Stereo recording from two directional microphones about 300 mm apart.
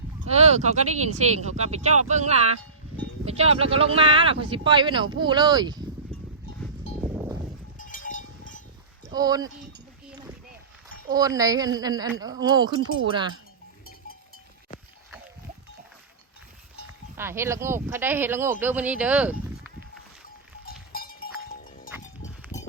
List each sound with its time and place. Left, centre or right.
0.3 s speech: right
6.1 s cowbell: centre
7.8 s cowbell: left
9.1 s a sound: centre
11.1 s speech: centre
17.2 s speech: centre
20.7 s livestock: left